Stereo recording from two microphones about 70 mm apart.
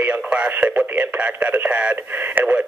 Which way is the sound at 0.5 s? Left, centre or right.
Right.